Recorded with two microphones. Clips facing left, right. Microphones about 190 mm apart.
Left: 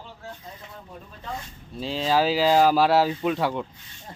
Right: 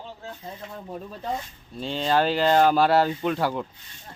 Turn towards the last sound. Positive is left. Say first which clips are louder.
# even
turn(degrees=0)  # may be behind; listen again after turning